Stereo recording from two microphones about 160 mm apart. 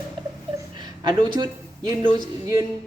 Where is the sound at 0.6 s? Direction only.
30° right (ahead or behind).